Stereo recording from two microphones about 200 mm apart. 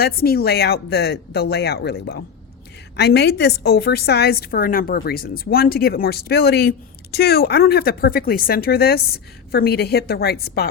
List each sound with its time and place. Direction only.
0.0 s a woman's voice: 50° left (ahead or behind)